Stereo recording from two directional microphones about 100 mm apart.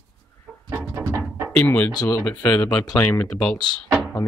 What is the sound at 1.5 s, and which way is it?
Speech, 15° left (ahead or behind).